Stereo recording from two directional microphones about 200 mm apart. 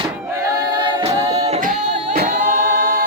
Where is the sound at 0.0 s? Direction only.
20° right (ahead or behind).